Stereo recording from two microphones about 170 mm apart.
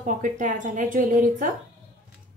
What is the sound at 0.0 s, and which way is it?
A woman's voice, 50° right (ahead or behind).